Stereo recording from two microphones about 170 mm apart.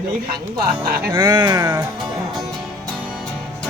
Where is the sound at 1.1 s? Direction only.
25° right (ahead or behind).